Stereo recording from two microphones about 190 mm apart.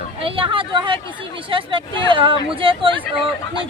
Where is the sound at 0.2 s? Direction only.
30° right (ahead or behind).